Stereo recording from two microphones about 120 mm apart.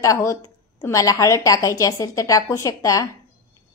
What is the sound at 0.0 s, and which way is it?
A woman's voice, 25° left (ahead or behind).